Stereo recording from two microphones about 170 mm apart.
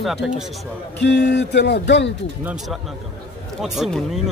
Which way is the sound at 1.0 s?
80° left.